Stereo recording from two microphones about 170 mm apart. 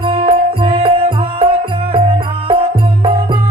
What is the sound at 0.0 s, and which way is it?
Music, 30° right (ahead or behind).